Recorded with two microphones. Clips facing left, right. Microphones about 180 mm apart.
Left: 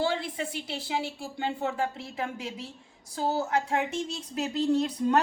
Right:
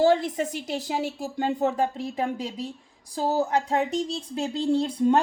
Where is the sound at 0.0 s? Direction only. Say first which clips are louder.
Right 8 dB; 40° right (ahead or behind).